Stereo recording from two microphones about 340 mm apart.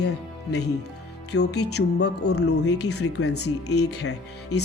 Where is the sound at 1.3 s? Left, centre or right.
Left.